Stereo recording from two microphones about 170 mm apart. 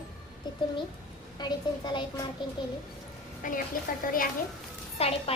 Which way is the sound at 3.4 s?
55° left (ahead or behind).